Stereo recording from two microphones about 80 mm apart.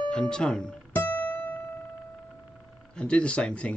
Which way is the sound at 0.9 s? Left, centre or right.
Left.